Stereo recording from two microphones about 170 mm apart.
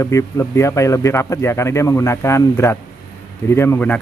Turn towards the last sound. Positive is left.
turn(degrees=10)  # may be behind; listen again after turning